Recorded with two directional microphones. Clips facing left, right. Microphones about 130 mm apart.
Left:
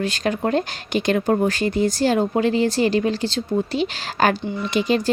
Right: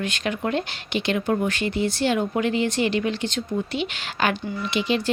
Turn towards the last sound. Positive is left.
turn(degrees=40)  # may be behind; listen again after turning